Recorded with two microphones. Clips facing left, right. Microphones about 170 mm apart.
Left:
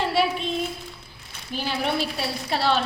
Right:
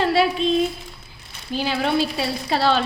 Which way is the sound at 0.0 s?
90° right.